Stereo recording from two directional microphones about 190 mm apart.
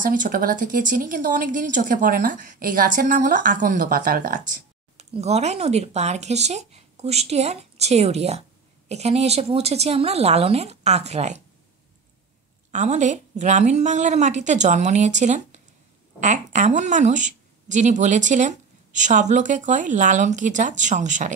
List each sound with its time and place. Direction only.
0.0 s a woman's voice: 45° right (ahead or behind)
5.1 s speech: 35° right (ahead or behind)
12.7 s speech: 40° right (ahead or behind)